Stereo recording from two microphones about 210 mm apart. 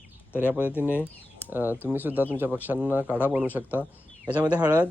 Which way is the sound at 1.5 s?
10° right (ahead or behind).